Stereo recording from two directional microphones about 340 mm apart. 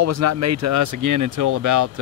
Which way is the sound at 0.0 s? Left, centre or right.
Right.